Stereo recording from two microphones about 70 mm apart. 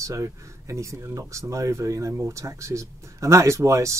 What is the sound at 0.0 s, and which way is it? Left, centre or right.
Speech, right.